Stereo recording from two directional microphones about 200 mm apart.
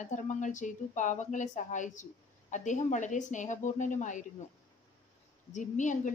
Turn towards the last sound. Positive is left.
turn(degrees=40)  # may be behind; listen again after turning